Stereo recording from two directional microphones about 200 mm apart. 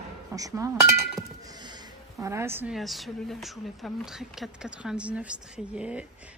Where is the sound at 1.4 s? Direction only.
20° right (ahead or behind).